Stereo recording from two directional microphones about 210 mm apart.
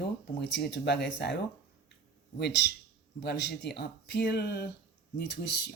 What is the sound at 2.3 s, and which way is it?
Speech, 50° left (ahead or behind).